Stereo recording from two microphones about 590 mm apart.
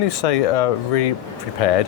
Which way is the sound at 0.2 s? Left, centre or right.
Left.